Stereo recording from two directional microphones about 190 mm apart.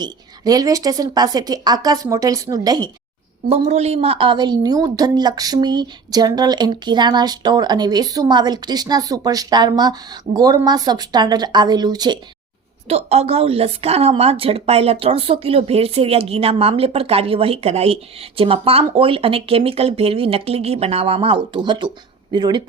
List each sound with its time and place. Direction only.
0.0 s a woman's voice: 20° right (ahead or behind)
3.5 s a woman's voice: 35° right (ahead or behind)
12.9 s a woman's voice: 35° right (ahead or behind)